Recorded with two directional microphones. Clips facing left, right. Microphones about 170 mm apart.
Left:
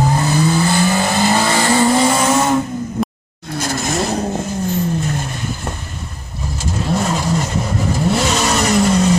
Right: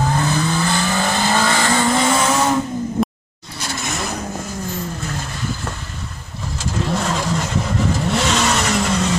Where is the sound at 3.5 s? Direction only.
45° left (ahead or behind).